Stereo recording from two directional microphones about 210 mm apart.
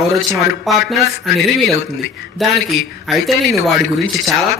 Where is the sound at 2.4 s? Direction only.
Centre (ahead or behind).